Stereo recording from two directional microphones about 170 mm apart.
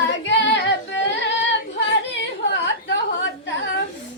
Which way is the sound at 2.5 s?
90° left.